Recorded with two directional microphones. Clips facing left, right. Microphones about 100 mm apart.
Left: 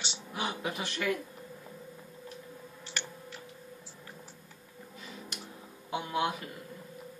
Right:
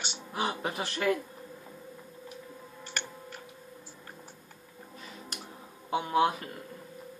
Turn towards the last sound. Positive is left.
turn(degrees=-35)  # may be behind; listen again after turning